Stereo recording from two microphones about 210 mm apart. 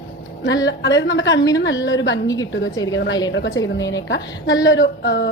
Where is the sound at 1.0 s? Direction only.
60° left (ahead or behind).